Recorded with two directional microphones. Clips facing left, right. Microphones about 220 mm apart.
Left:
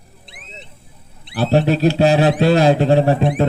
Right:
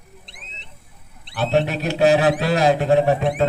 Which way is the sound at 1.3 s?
35° left (ahead or behind).